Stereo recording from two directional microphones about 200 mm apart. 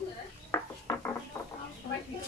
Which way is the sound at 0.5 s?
15° left (ahead or behind).